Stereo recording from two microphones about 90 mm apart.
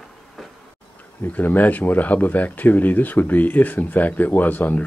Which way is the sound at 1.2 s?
20° left (ahead or behind).